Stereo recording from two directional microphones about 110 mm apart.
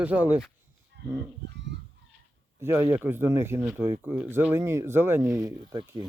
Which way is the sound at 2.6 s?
25° right (ahead or behind).